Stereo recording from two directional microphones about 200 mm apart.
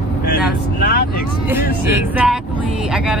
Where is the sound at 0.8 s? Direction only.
50° left (ahead or behind).